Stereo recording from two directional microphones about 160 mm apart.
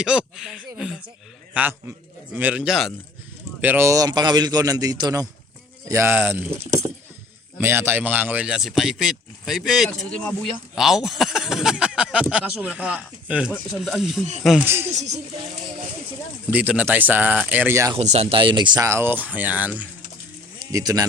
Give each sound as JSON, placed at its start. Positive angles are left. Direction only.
{"t": 0.0, "sound": "speech", "side_deg": -5}
{"t": 3.6, "sound": "a man's voice", "side_deg": -15}
{"t": 14.6, "sound": "speech", "side_deg": -15}
{"t": 14.8, "sound": "speech", "side_deg": -45}
{"t": 16.5, "sound": "speech", "side_deg": -10}
{"t": 17.9, "sound": "speech", "side_deg": -40}
{"t": 18.9, "sound": "speech", "side_deg": -15}
{"t": 20.7, "sound": "a man's voice", "side_deg": -20}